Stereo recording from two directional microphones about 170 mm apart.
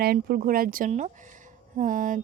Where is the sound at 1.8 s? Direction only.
50° right (ahead or behind).